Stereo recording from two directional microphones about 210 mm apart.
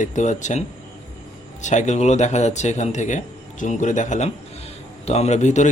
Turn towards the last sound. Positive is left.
turn(degrees=35)  # may be behind; listen again after turning